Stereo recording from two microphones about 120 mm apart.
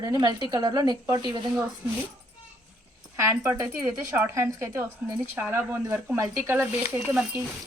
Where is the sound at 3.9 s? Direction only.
15° right (ahead or behind).